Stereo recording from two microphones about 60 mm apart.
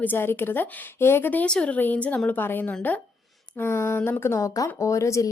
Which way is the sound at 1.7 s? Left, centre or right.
Left.